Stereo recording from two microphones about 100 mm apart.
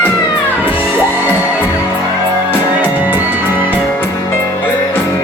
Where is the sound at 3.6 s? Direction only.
15° left (ahead or behind).